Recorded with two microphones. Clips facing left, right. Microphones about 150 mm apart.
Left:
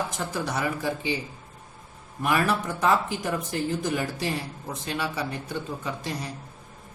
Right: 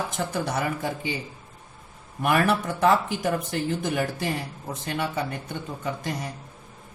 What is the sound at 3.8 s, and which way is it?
Speech, 60° right (ahead or behind).